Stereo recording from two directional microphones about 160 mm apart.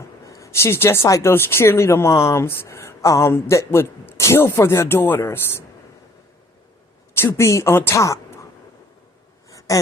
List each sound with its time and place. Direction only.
0.3 s speech: 20° left (ahead or behind)
7.2 s speech: 15° left (ahead or behind)
9.5 s a sound: 20° left (ahead or behind)